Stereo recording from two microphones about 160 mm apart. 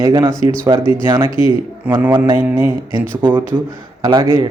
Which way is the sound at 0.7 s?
30° right (ahead or behind).